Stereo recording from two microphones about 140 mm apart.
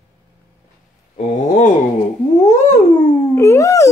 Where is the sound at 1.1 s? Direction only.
60° left (ahead or behind).